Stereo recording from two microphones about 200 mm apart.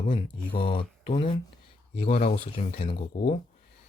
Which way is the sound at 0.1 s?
25° left (ahead or behind).